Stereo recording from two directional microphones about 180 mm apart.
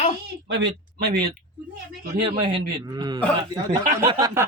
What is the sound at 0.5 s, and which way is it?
Speech, 65° right (ahead or behind).